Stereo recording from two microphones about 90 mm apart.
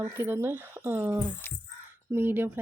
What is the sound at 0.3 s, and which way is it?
Speech, 25° right (ahead or behind).